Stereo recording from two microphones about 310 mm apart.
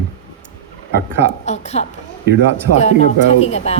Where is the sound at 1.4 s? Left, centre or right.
Left.